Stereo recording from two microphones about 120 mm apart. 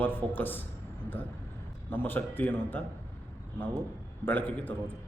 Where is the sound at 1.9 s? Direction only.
15° left (ahead or behind).